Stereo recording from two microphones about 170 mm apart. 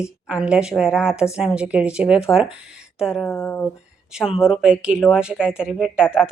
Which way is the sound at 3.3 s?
15° left (ahead or behind).